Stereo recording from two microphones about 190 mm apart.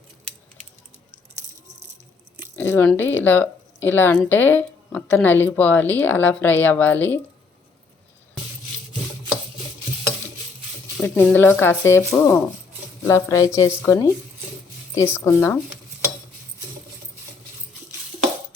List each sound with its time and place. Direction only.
2.6 s a woman's voice: 10° left (ahead or behind)
11.0 s a woman's voice: 5° left (ahead or behind)